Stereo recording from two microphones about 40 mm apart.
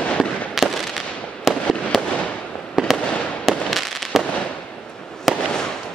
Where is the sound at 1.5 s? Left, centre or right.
Centre.